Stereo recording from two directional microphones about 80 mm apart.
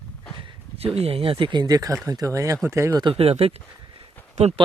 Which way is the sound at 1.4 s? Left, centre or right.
Right.